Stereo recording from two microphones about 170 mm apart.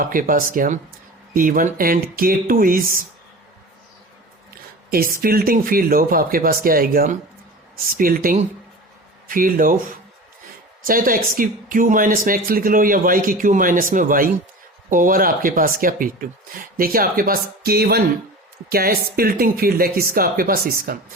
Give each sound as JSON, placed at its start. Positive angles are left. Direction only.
{"t": 0.0, "sound": "speech", "side_deg": -55}
{"t": 4.9, "sound": "speech", "side_deg": -60}
{"t": 10.8, "sound": "speech", "side_deg": -55}